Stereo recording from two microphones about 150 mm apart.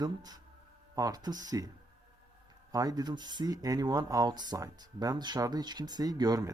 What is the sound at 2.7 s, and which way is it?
Speech, 25° right (ahead or behind).